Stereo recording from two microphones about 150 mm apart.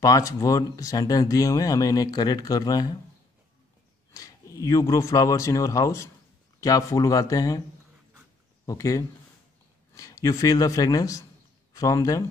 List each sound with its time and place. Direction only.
0.0 s speech: 20° left (ahead or behind)
4.1 s speech: 25° left (ahead or behind)
8.6 s speech: 20° left (ahead or behind)